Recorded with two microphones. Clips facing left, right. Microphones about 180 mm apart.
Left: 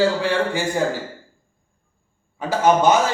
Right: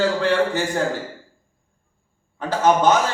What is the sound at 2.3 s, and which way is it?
Speech, 10° left (ahead or behind).